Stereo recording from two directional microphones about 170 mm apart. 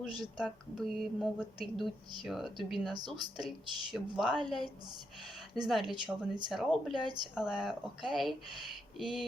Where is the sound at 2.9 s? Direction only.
25° right (ahead or behind).